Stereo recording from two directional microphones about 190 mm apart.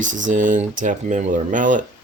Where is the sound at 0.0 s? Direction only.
40° right (ahead or behind).